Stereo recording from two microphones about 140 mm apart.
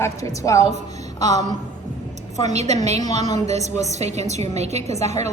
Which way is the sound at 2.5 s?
55° right (ahead or behind).